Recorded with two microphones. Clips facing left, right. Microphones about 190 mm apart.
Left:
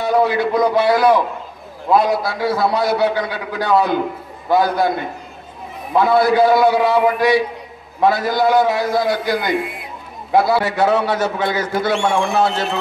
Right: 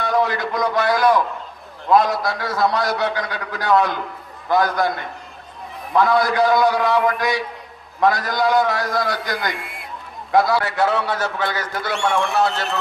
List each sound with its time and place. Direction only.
0.0 s a sound: 5° left (ahead or behind)
1.9 s a man's voice: 5° left (ahead or behind)
5.9 s a man's voice: 5° left (ahead or behind)
11.8 s a man's voice: 25° left (ahead or behind)